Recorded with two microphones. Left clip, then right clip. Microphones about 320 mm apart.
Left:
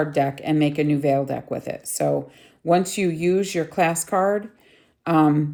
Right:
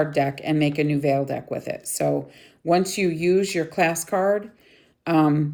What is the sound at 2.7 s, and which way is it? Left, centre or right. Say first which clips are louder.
Speech: left 1 dB; centre.